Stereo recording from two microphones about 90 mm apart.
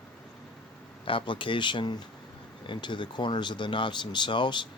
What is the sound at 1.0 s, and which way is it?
Speech, 70° left (ahead or behind).